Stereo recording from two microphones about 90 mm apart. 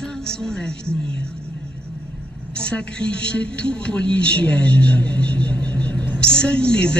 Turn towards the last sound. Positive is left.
turn(degrees=10)  # may be behind; listen again after turning